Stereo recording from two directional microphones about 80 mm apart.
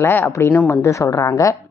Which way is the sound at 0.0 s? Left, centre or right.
Left.